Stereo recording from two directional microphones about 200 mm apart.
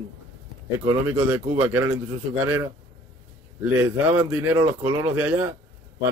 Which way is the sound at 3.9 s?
10° right (ahead or behind).